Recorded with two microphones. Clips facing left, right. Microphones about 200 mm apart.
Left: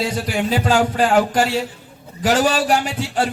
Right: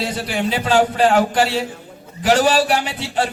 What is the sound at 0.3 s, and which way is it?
A man's voice, 45° left (ahead or behind).